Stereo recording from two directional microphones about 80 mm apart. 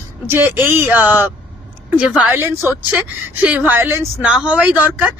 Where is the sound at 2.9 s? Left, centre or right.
Centre.